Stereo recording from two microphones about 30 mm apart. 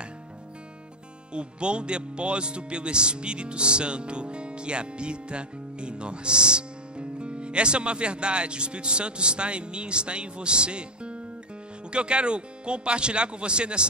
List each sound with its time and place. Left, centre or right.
1.3 s speech: right